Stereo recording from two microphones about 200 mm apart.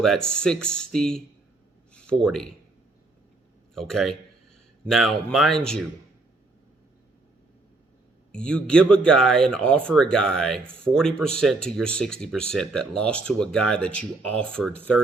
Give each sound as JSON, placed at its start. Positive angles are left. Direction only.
{"t": 0.0, "sound": "speech", "side_deg": 0}
{"t": 1.9, "sound": "a sound", "side_deg": 5}
{"t": 3.8, "sound": "speech", "side_deg": 0}
{"t": 8.3, "sound": "speech", "side_deg": 5}